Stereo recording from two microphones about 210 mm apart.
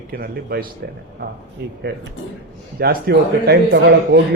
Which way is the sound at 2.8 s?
50° right (ahead or behind).